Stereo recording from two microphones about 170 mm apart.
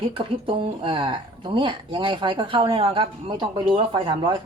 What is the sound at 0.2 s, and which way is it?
Speech, 30° right (ahead or behind).